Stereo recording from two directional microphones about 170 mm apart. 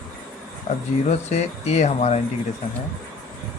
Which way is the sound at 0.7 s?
45° left (ahead or behind).